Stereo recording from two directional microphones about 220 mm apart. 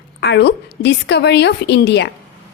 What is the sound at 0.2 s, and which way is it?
A woman's voice, 50° left (ahead or behind).